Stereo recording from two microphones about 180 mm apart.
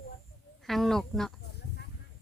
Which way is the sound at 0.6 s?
Centre (ahead or behind).